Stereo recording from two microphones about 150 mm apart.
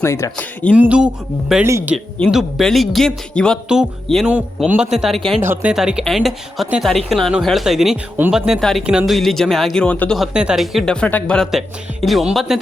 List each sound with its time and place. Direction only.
0.0 s speech: 20° left (ahead or behind)
0.8 s a man's voice: 5° right (ahead or behind)
2.1 s a woman's voice: 5° left (ahead or behind)
5.4 s a man's voice: 15° right (ahead or behind)
5.7 s a woman's voice: 5° right (ahead or behind)
10.3 s a woman's voice: 5° right (ahead or behind)